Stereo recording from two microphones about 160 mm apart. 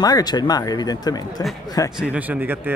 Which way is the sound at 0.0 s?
25° left (ahead or behind).